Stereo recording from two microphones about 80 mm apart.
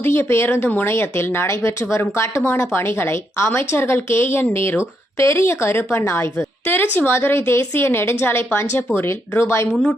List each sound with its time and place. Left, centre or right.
0.0 s a woman's voice: left